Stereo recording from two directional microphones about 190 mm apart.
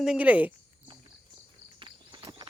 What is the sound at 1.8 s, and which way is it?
Walk, 25° right (ahead or behind).